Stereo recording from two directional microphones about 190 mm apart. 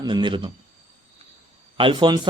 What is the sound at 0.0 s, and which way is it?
Speech, 25° right (ahead or behind).